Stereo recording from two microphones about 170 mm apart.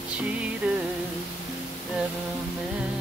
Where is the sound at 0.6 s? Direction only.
5° right (ahead or behind).